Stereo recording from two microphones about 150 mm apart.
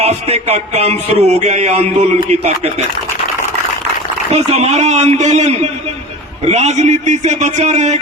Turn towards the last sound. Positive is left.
turn(degrees=-50)  # may be behind; listen again after turning